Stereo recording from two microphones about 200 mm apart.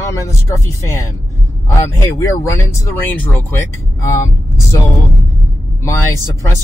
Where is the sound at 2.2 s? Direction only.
15° left (ahead or behind).